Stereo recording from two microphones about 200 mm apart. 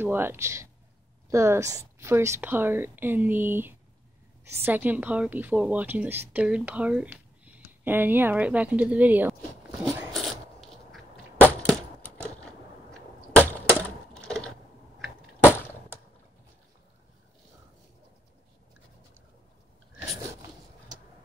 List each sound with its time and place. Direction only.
0.0 s a woman's voice: 10° right (ahead or behind)
9.7 s zipper: 15° right (ahead or behind)
10.1 s a sound: centre (ahead or behind)
12.4 s wood: 5° left (ahead or behind)
15.0 s cap gun: 10° left (ahead or behind)